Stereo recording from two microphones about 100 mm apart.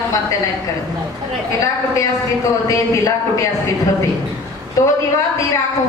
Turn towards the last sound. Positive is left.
turn(degrees=30)  # may be behind; listen again after turning